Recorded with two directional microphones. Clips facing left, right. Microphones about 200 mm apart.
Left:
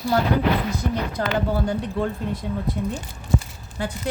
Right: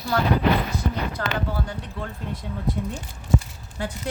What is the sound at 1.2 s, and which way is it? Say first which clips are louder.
Speech: left 5 dB; 20° left (ahead or behind).